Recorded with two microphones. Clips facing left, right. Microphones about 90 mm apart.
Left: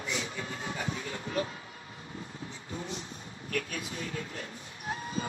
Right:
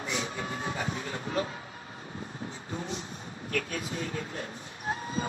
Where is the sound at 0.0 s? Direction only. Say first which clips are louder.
Right 2 dB; 35° right (ahead or behind).